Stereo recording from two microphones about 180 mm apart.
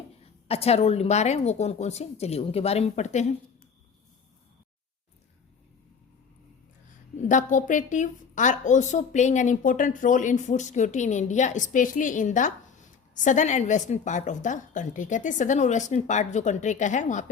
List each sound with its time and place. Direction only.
0.4 s a woman's voice: 35° left (ahead or behind)
7.3 s a woman's voice: 45° left (ahead or behind)